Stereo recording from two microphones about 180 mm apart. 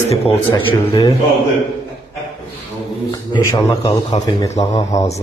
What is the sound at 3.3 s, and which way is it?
Speech, 20° left (ahead or behind).